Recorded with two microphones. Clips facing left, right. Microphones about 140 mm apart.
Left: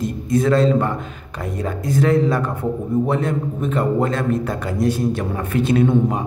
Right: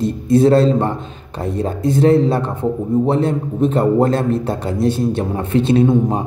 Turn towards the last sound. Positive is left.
turn(degrees=-25)  # may be behind; listen again after turning